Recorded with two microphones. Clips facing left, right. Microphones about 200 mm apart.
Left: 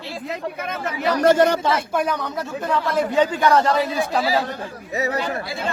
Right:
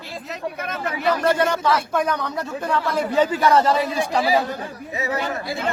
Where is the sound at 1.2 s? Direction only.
40° left (ahead or behind).